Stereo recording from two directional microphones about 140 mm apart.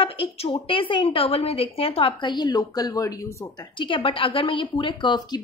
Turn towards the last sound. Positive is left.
turn(degrees=30)  # may be behind; listen again after turning